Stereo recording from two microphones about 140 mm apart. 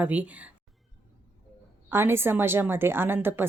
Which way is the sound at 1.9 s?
15° right (ahead or behind).